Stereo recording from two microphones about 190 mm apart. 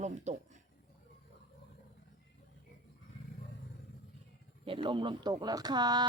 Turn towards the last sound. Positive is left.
turn(degrees=-20)  # may be behind; listen again after turning